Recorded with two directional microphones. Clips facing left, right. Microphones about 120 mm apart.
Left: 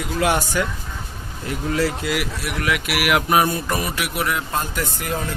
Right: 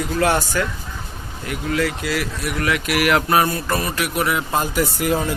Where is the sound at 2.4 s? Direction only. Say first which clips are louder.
Right 4 dB; 5° left (ahead or behind).